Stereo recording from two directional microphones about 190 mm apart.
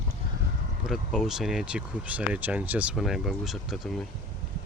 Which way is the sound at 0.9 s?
5° right (ahead or behind).